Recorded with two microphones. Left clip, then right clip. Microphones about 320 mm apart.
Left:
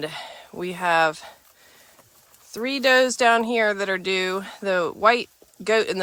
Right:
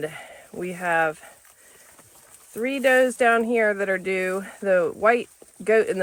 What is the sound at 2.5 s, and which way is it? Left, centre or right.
Speech, centre.